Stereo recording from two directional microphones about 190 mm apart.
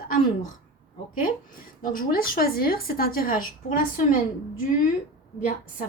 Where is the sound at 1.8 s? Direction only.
50° left (ahead or behind).